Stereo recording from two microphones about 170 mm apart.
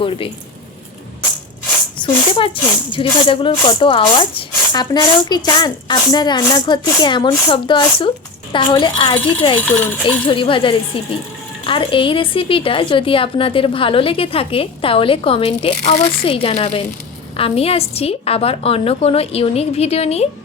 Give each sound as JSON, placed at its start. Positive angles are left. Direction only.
{"t": 0.0, "sound": "a woman's voice", "side_deg": 30}
{"t": 2.0, "sound": "a woman's voice", "side_deg": 30}